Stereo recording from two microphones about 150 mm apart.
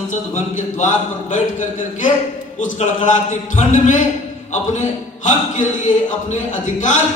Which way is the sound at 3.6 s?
55° left (ahead or behind).